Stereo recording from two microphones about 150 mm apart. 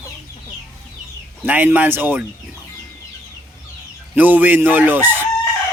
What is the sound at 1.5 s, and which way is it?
Chicken, 10° right (ahead or behind).